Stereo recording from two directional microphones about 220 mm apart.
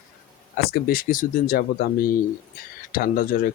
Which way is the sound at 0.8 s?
40° left (ahead or behind).